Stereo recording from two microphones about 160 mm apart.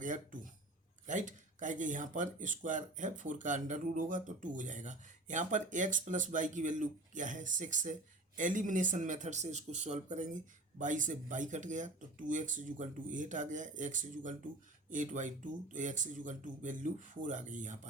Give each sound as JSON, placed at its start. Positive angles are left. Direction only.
{"t": 0.0, "sound": "speech", "side_deg": -55}